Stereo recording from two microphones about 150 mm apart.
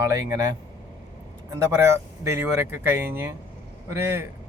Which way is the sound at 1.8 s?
20° right (ahead or behind).